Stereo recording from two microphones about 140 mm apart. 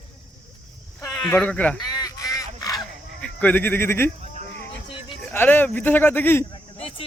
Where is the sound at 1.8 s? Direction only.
25° left (ahead or behind).